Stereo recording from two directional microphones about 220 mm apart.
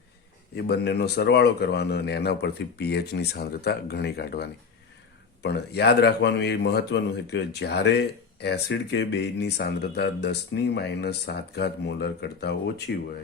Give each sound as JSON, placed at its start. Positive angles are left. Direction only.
{"t": 0.5, "sound": "speech", "side_deg": 50}